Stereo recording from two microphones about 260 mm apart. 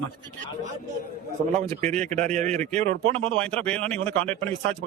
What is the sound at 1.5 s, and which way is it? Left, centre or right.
Speech, right.